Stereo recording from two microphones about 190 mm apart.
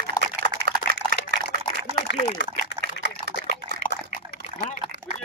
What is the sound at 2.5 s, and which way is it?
Liquid, 55° right (ahead or behind).